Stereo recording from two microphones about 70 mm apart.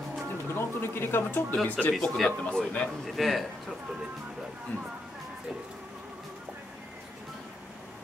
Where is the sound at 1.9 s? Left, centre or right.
Centre.